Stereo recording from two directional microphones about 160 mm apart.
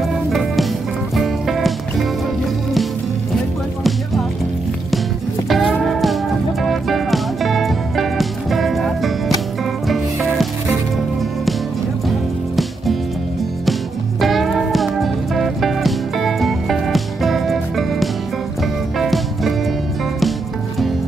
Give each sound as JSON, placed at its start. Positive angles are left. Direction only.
{"t": 0.3, "sound": "music", "side_deg": 0}
{"t": 5.5, "sound": "music", "side_deg": 0}
{"t": 14.2, "sound": "music", "side_deg": 0}